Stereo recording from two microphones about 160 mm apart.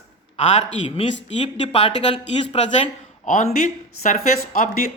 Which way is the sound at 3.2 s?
45° left (ahead or behind).